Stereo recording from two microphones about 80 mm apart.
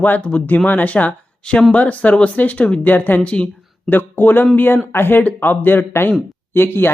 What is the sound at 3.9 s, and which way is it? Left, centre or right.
Speech, left.